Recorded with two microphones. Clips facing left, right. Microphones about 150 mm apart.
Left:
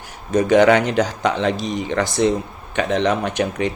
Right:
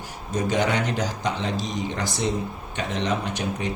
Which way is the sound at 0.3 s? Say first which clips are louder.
Left 10 dB; 75° left (ahead or behind).